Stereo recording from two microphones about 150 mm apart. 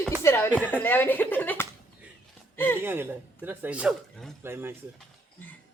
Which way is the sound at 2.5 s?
15° left (ahead or behind).